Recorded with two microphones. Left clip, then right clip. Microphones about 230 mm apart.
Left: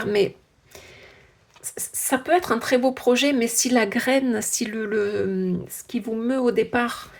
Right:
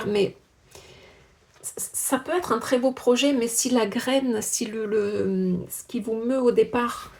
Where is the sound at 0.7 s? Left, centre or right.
Left.